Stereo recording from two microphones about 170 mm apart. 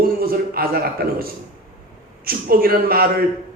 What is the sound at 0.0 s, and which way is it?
A man's voice, 60° right (ahead or behind).